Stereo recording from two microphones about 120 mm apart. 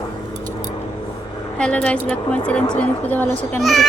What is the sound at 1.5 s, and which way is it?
A woman's voice, 10° left (ahead or behind).